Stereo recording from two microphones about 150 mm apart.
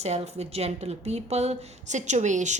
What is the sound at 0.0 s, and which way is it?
A woman's voice, 45° right (ahead or behind).